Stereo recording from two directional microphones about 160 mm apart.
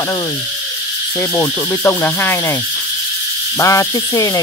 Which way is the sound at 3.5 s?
20° left (ahead or behind).